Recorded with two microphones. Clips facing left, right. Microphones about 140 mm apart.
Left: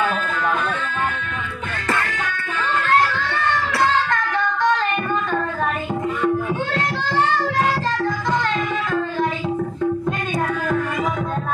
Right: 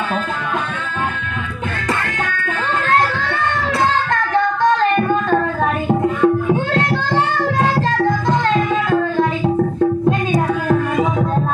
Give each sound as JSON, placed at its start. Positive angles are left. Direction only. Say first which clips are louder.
{"t": 5.9, "sound": "music", "louder": "right 8 dB", "side_deg": -50}